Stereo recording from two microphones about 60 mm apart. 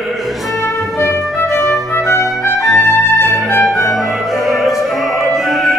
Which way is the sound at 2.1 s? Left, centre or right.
Left.